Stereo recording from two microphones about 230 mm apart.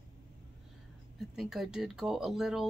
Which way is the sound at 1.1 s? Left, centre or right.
Centre.